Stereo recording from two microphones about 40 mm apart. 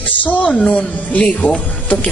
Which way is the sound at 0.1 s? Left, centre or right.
Left.